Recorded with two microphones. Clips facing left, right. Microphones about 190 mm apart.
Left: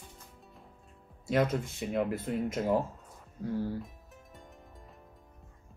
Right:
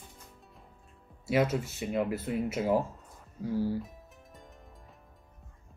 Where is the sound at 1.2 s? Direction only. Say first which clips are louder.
Right 1 dB; 5° right (ahead or behind).